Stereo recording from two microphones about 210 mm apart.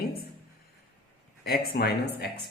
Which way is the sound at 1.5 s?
45° left (ahead or behind).